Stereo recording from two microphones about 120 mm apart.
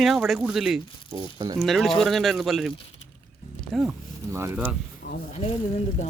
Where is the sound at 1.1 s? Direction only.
35° right (ahead or behind).